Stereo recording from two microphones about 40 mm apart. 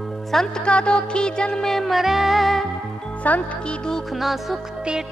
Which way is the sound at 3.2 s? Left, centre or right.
Left.